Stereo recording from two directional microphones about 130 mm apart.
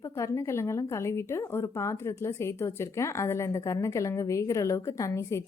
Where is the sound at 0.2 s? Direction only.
20° left (ahead or behind).